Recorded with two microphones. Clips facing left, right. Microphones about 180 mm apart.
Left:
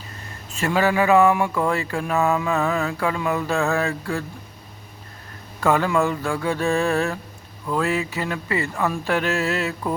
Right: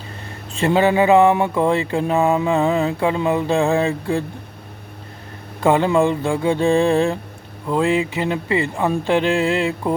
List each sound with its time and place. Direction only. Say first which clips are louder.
0.6 s mantra: right 4 dB; 25° right (ahead or behind)
5.5 s mantra: right 4 dB; 20° right (ahead or behind)